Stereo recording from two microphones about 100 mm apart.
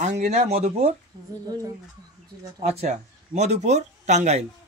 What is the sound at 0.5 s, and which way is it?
Speech, 90° right.